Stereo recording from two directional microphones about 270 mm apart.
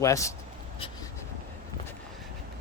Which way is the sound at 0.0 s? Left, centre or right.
Centre.